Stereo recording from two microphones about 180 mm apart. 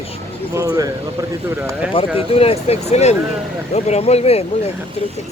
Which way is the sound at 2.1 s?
35° left (ahead or behind).